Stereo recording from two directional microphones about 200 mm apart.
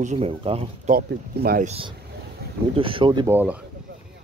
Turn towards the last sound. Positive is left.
turn(degrees=-20)  # may be behind; listen again after turning